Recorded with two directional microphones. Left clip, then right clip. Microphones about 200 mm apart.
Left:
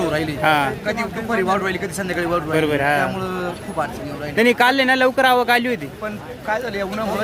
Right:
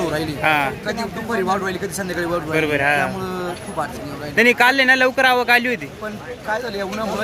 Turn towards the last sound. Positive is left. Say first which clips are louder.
# left 1 dB
turn(degrees=5)  # may be behind; listen again after turning